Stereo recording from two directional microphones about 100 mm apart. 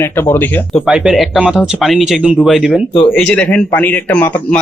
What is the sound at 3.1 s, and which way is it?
Speech, 10° left (ahead or behind).